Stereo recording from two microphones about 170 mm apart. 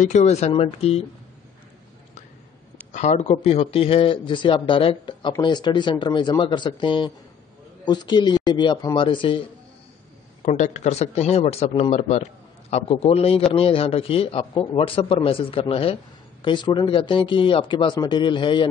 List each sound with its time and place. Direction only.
0.0 s speech: 45° left (ahead or behind)
2.9 s speech: 45° left (ahead or behind)
10.4 s speech: 45° left (ahead or behind); by 18.7 s 30° left (ahead or behind)